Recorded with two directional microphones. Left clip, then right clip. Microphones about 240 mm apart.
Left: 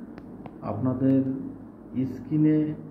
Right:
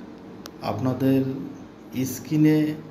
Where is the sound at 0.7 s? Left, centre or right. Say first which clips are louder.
Right 2 dB; centre.